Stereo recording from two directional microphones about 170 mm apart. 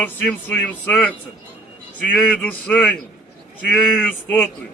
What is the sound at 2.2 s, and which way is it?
Speech, 10° left (ahead or behind).